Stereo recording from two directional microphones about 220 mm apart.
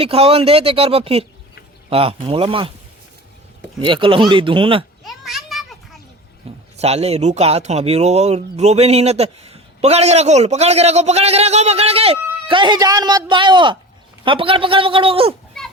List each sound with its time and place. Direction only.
0.0 s speech: 25° right (ahead or behind)
3.8 s speech: 20° right (ahead or behind)
5.0 s children playing: centre (ahead or behind)
6.7 s speech: 30° right (ahead or behind)